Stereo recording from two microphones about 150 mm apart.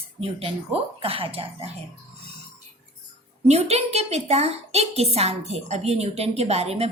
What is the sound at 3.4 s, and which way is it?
A woman's voice, 45° right (ahead or behind).